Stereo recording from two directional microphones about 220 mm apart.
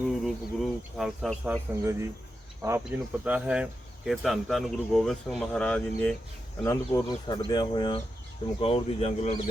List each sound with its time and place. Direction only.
0.1 s speech: centre (ahead or behind)
1.8 s speech: 10° right (ahead or behind); by 6.1 s 5° left (ahead or behind)
6.7 s speech: 15° left (ahead or behind)